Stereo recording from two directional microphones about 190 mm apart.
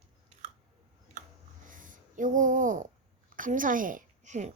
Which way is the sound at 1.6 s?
45° right (ahead or behind).